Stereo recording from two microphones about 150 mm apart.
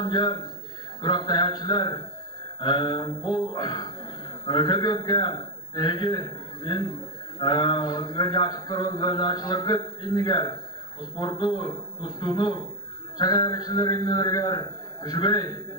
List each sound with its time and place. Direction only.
0.0 s a man's voice: 25° left (ahead or behind)